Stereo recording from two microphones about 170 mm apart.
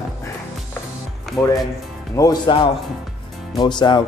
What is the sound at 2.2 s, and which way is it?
Speech, 25° left (ahead or behind).